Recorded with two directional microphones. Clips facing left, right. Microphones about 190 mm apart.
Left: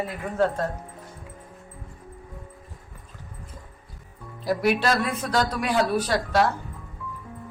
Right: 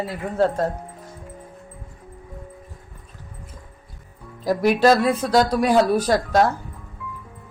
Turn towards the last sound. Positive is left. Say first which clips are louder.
# right 4 dB
turn(degrees=-45)  # may be behind; listen again after turning